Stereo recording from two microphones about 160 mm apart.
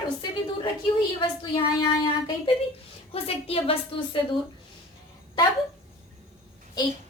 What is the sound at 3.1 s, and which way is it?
A woman's voice, 35° left (ahead or behind).